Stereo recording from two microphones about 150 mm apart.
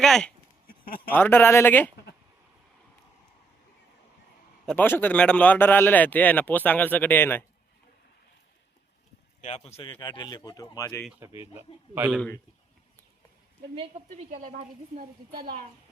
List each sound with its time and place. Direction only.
0.0 s a man's voice: 5° left (ahead or behind)
4.6 s a man's voice: 10° left (ahead or behind)
9.4 s speech: 50° left (ahead or behind); by 11.0 s 20° left (ahead or behind)
11.2 s a man's voice: 15° right (ahead or behind)
14.3 s a woman's voice: 60° right (ahead or behind)
14.9 s a woman's voice: 90° right